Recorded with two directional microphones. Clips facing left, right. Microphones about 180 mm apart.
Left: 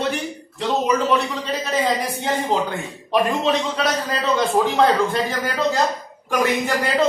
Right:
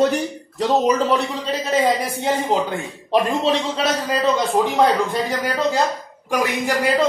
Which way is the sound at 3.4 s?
30° right (ahead or behind).